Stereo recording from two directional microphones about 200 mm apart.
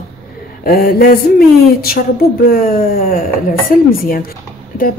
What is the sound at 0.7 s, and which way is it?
Speech, 50° left (ahead or behind).